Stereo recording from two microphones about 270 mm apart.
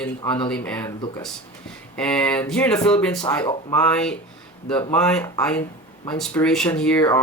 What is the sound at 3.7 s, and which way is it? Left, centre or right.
Speech, centre.